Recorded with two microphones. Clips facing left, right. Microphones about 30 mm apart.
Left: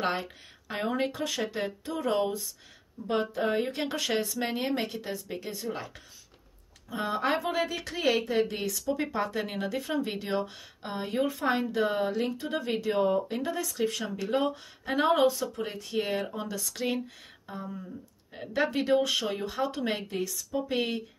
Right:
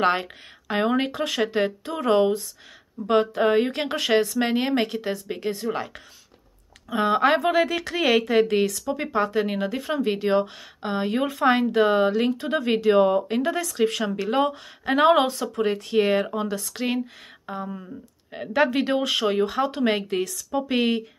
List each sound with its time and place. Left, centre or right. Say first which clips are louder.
0.2 s speech: right 4 dB; right
3.1 s speech: right 8 dB; right
3.8 s speech: right 8 dB; right
5.3 s speech: right 9 dB; right
8.8 s speech: right 5 dB; right
11.2 s speech: right 8 dB; right
16.3 s speech: right 7 dB; right
17.5 s speech: right 6 dB; right